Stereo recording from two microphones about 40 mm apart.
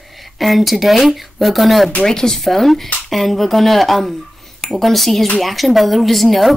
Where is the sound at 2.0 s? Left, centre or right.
Centre.